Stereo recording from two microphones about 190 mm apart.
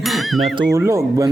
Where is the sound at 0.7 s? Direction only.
15° right (ahead or behind).